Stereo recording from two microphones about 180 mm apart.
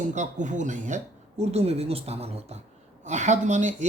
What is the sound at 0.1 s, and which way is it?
Speech, 40° right (ahead or behind).